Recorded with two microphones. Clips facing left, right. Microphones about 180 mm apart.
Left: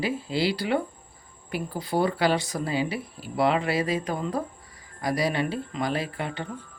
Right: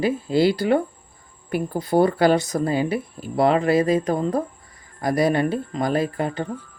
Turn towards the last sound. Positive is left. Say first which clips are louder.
# right 7 dB
turn(degrees=-40)  # may be behind; listen again after turning